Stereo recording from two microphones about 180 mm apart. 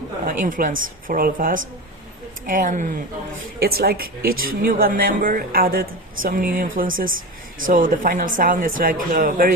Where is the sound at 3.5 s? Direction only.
60° right (ahead or behind).